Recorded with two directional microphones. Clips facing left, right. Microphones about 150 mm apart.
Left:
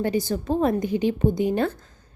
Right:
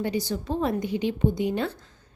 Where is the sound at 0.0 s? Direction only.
50° left (ahead or behind).